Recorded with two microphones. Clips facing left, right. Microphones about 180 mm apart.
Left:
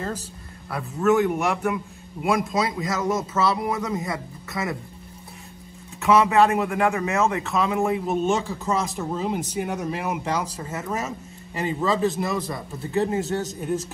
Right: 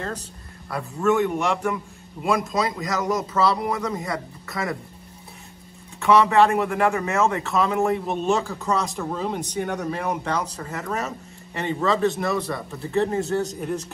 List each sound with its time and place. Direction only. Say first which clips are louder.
0.7 s speech: left 1 dB; centre (ahead or behind)
5.9 s speech: right 1 dB; centre (ahead or behind)